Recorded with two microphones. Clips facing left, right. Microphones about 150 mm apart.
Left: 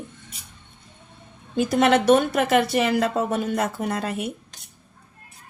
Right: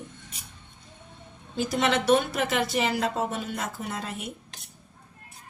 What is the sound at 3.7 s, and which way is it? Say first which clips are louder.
Speech: left 7 dB; 65° left (ahead or behind).